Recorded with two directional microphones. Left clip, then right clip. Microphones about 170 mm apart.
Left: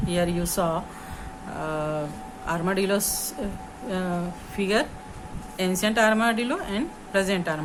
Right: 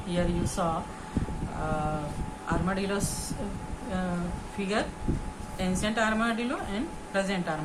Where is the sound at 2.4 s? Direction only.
75° left (ahead or behind).